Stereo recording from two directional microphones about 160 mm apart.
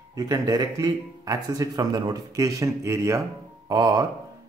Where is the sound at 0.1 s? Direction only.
25° right (ahead or behind).